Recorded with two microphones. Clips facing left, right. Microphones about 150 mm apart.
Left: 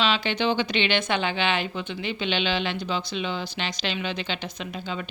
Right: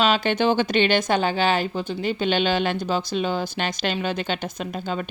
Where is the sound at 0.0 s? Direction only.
45° right (ahead or behind).